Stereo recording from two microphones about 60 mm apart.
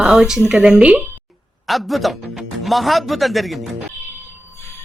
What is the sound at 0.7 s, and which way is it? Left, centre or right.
Speech, right.